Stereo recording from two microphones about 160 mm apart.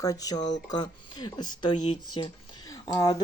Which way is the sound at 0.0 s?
20° left (ahead or behind).